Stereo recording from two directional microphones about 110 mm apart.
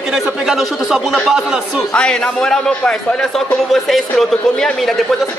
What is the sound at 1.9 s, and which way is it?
A man's voice, 10° left (ahead or behind).